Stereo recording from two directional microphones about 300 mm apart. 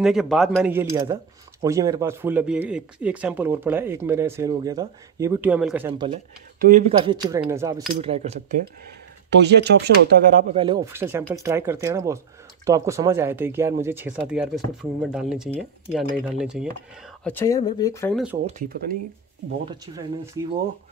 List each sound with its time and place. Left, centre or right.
0.0 s speech: centre; by 8.6 s right
9.3 s speech: right; by 18.2 s centre
18.6 s speech: right
19.6 s speech: centre